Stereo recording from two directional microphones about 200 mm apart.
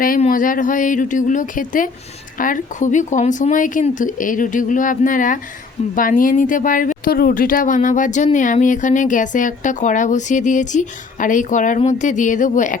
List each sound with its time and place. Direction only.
0.0 s speech: 45° left (ahead or behind)